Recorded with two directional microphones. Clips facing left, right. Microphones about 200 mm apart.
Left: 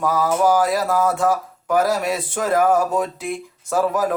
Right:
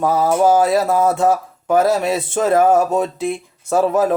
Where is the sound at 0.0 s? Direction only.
25° right (ahead or behind).